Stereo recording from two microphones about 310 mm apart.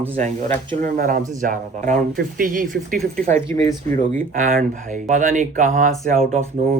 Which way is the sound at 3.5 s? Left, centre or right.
Centre.